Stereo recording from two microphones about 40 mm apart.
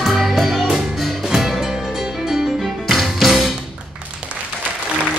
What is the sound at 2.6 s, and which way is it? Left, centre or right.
Music, centre.